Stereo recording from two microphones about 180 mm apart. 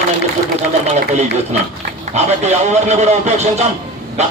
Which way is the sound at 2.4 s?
40° right (ahead or behind).